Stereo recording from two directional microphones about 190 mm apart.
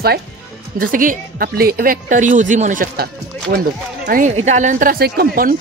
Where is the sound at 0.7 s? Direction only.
45° right (ahead or behind).